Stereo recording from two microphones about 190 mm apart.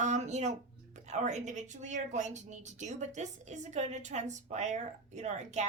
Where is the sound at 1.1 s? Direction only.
40° right (ahead or behind).